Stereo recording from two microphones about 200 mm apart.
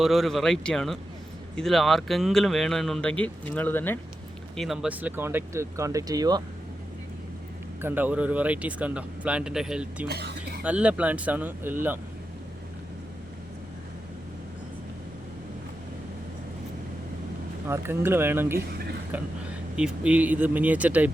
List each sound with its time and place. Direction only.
0.0 s speech: centre (ahead or behind)
4.5 s speech: centre (ahead or behind); by 6.4 s 20° right (ahead or behind)
7.8 s speech: 10° right (ahead or behind)
10.1 s a sound: 55° right (ahead or behind)
10.6 s speech: 5° right (ahead or behind)
17.7 s speech: 10° right (ahead or behind)